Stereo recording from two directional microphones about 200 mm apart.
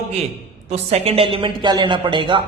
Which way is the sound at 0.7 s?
30° right (ahead or behind).